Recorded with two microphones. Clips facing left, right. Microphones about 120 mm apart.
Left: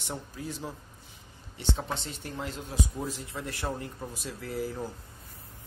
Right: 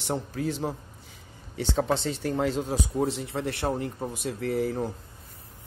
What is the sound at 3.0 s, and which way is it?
Speech, 70° right (ahead or behind).